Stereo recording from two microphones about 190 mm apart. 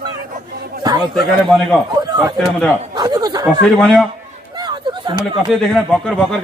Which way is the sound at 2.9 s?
20° right (ahead or behind).